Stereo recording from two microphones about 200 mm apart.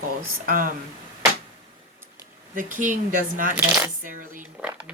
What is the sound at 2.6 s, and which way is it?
Speech, 40° right (ahead or behind).